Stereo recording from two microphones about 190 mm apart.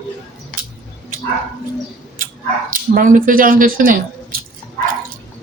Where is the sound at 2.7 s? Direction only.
45° right (ahead or behind).